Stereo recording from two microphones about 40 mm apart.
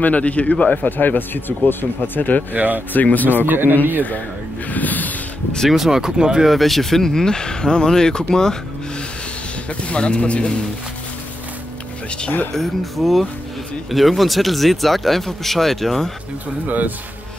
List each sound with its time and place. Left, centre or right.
0.0 s speech: left
0.8 s speech: left
2.5 s speech: right
2.9 s speech: left
3.4 s speech: right
4.6 s a sound: left
5.7 s speech: centre
6.4 s speech: centre
9.7 s speech: left
12.5 s speech: centre
16.6 s speech: right